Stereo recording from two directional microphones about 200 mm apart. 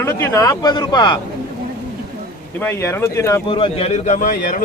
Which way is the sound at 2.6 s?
10° left (ahead or behind).